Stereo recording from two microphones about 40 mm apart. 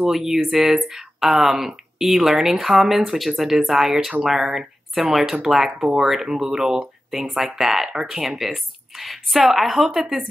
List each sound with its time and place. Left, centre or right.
0.0 s speech: centre